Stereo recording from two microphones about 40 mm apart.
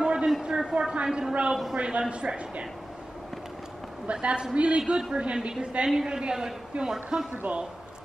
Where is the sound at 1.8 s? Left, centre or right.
Right.